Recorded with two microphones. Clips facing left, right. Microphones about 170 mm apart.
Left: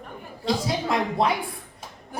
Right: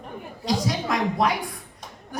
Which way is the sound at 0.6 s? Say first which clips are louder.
Even; 25° left (ahead or behind).